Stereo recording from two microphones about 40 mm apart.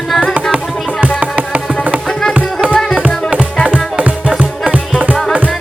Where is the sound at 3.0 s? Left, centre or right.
Right.